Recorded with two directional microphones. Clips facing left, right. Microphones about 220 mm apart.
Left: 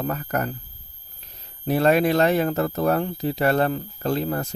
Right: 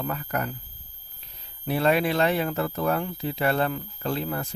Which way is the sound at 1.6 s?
45° left (ahead or behind).